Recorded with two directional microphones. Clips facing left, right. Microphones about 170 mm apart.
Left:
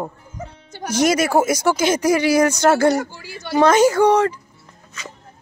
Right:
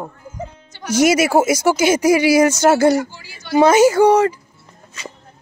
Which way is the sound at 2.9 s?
55° left (ahead or behind).